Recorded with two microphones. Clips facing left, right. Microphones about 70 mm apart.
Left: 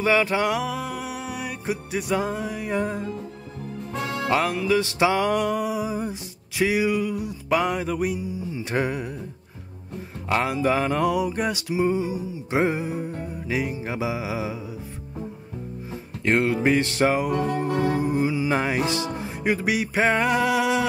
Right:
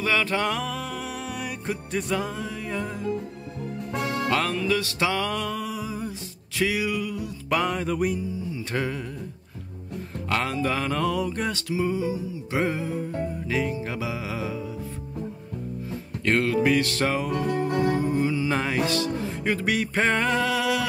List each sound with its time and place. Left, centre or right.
0.0 s music: centre
3.9 s music: right
4.3 s music: centre
7.4 s music: centre
8.5 s music: left
10.3 s music: centre
15.9 s music: left